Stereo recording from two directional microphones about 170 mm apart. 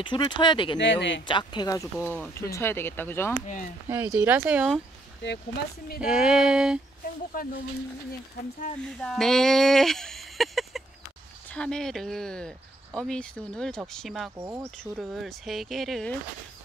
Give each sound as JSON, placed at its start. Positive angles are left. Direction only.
{"t": 0.0, "sound": "speech", "side_deg": 30}
{"t": 0.7, "sound": "speech", "side_deg": 90}
{"t": 1.2, "sound": "speech", "side_deg": 25}
{"t": 3.9, "sound": "speech", "side_deg": -10}
{"t": 5.9, "sound": "speech", "side_deg": -5}
{"t": 7.3, "sound": "speech", "side_deg": 55}
{"t": 9.0, "sound": "speech", "side_deg": 5}
{"t": 14.3, "sound": "speech", "side_deg": -20}
{"t": 14.8, "sound": "speech", "side_deg": 5}